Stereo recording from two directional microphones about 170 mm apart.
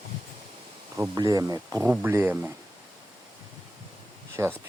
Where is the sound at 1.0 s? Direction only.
20° right (ahead or behind).